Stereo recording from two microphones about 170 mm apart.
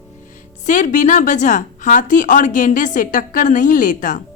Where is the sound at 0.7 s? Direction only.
50° left (ahead or behind).